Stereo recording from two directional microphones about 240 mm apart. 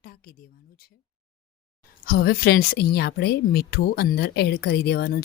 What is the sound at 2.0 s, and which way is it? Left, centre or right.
Speech, left.